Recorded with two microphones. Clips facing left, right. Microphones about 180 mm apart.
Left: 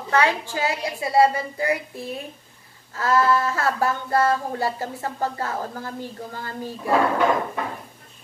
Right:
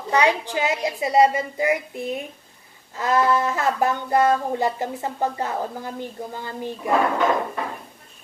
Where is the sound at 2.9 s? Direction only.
20° right (ahead or behind).